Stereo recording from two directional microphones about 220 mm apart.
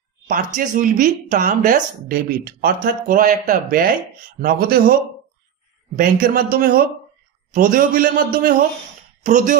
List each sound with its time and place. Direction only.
0.6 s speech: 40° right (ahead or behind)
5.9 s speech: 40° right (ahead or behind)